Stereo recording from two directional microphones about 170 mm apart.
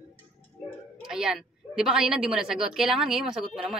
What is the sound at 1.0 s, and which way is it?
A woman's voice, 5° right (ahead or behind).